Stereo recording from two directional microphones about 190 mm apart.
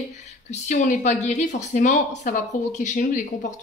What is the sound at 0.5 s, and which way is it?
Speech, 40° left (ahead or behind).